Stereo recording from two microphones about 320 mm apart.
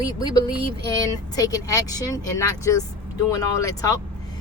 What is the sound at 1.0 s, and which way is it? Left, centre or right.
Speech, centre.